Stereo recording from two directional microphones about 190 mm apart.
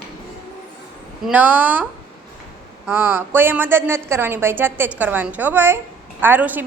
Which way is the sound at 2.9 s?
10° right (ahead or behind).